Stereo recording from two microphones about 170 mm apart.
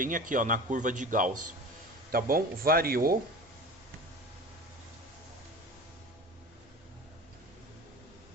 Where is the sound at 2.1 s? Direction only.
60° right (ahead or behind).